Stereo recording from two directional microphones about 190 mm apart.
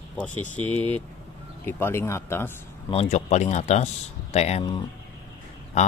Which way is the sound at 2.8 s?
35° left (ahead or behind).